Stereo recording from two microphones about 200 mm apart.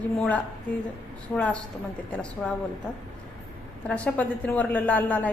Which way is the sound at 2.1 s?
5° left (ahead or behind).